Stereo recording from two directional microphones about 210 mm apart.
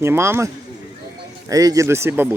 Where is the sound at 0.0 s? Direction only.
10° right (ahead or behind).